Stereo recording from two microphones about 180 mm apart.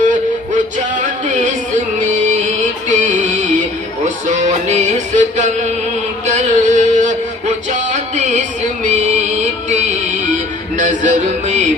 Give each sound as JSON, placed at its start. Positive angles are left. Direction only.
{"t": 0.0, "sound": "music", "side_deg": -45}
{"t": 4.3, "sound": "music", "side_deg": -40}
{"t": 10.8, "sound": "music", "side_deg": -45}